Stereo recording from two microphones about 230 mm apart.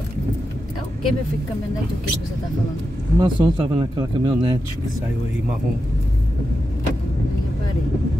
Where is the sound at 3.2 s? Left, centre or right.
Right.